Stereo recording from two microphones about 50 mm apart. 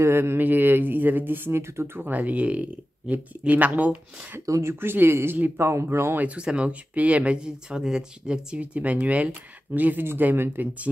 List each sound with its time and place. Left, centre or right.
0.0 s speech: right
0.4 s speech: right
4.5 s speech: right
4.7 s speech: right
6.1 s speech: right
8.5 s speech: right
10.0 s speech: right